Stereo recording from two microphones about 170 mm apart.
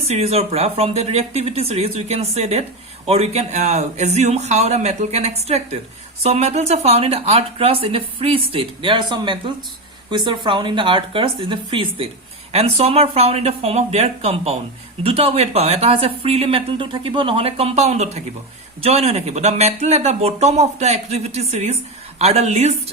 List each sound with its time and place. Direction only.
0.1 s speech: 35° right (ahead or behind)